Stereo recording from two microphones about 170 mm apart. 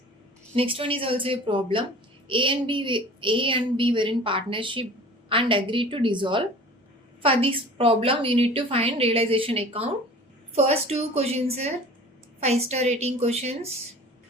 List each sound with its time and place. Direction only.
0.5 s a woman's voice: 35° right (ahead or behind)